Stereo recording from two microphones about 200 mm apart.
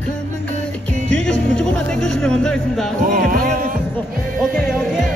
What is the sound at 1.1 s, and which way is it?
Music, 5° left (ahead or behind).